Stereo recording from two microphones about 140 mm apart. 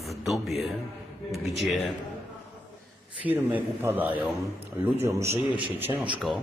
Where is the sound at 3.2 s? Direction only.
15° right (ahead or behind).